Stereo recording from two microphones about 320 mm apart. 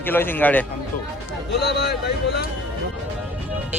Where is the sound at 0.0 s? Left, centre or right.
Centre.